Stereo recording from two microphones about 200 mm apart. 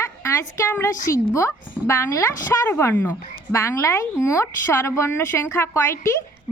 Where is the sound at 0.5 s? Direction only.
15° left (ahead or behind).